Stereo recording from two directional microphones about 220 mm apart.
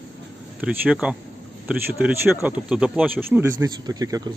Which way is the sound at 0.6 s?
5° right (ahead or behind).